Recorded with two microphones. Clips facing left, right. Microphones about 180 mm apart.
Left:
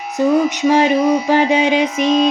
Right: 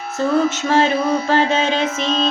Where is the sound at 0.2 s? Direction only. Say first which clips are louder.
Left 3 dB; 15° left (ahead or behind).